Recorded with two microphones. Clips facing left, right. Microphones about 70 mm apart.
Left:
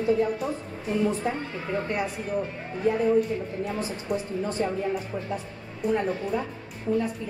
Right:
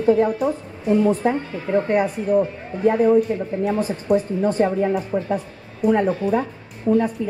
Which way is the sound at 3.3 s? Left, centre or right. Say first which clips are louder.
Right 6 dB; right.